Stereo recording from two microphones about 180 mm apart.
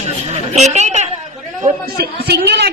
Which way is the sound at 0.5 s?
40° right (ahead or behind).